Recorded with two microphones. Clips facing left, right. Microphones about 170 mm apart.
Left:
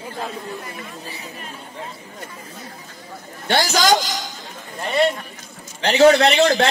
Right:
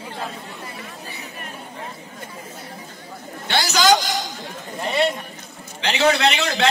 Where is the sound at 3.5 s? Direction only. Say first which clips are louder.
Left 3 dB; 40° left (ahead or behind).